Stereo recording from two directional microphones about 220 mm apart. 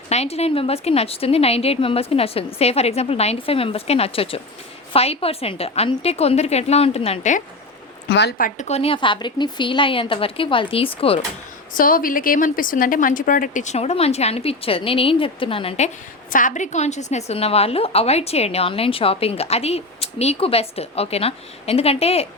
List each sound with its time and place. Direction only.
0.1 s a woman's voice: 30° left (ahead or behind)
8.1 s a woman's voice: 50° left (ahead or behind); by 11.2 s 25° left (ahead or behind)
11.7 s a woman's voice: 40° left (ahead or behind)
16.3 s a woman's voice: 35° left (ahead or behind)